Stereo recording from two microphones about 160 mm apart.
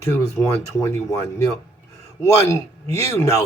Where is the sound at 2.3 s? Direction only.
20° left (ahead or behind).